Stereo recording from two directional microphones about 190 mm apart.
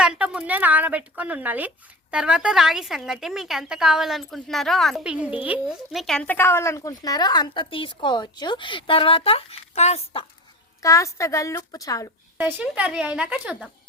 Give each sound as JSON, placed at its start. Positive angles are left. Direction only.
{"t": 0.0, "sound": "speech", "side_deg": -5}
{"t": 10.8, "sound": "a woman's voice", "side_deg": 15}
{"t": 12.4, "sound": "speech", "side_deg": -10}